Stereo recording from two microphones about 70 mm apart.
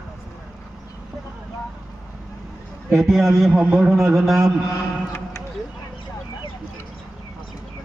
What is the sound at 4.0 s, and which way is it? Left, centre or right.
Speech, right.